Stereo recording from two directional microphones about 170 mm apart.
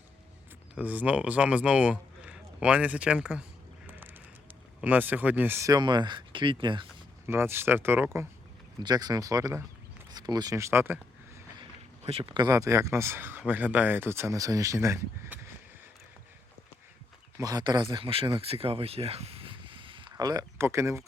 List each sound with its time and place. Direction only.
0.8 s speech: 10° right (ahead or behind)
4.8 s speech: 10° right (ahead or behind); by 6.8 s 30° right (ahead or behind)
7.3 s speech: 15° right (ahead or behind)
10.1 s a sound: 25° right (ahead or behind)
12.0 s speech: 35° right (ahead or behind); by 15.4 s 15° right (ahead or behind)
17.3 s speech: 20° right (ahead or behind)